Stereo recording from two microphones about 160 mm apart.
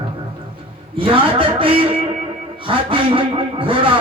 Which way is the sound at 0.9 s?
30° right (ahead or behind).